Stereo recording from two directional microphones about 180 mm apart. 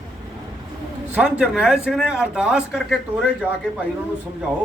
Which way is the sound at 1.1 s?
5° right (ahead or behind).